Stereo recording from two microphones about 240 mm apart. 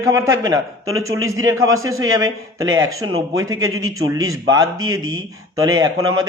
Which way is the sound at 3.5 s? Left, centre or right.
Right.